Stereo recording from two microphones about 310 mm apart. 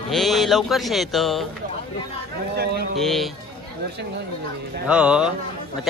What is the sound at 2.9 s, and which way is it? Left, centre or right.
Speech, centre.